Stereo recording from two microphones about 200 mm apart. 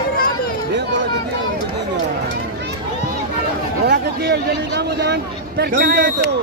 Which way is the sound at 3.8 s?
55° right (ahead or behind).